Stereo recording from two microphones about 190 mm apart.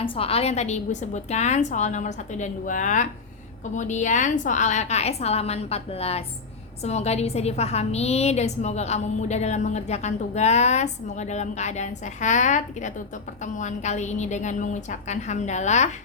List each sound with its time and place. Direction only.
0.0 s a woman's voice: 30° left (ahead or behind)